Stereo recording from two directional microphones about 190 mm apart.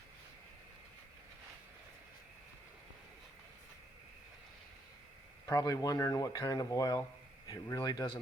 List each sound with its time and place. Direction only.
5.5 s speech: 20° left (ahead or behind)